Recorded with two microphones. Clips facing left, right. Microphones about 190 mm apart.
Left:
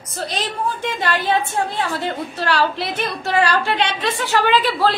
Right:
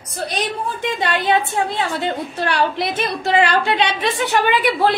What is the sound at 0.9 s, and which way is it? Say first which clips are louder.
A woman's voice: right 3 dB; 20° right (ahead or behind).